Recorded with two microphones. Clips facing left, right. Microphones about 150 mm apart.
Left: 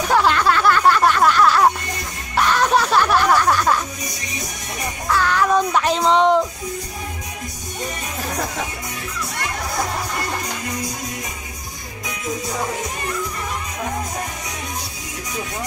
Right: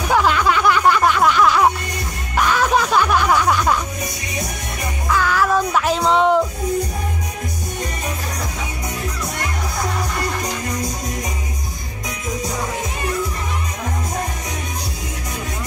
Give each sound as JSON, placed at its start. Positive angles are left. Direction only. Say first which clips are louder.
{"t": 0.1, "sound": "music", "louder": "right 1 dB", "side_deg": -10}
{"t": 5.2, "sound": "music", "louder": "left 1 dB", "side_deg": -5}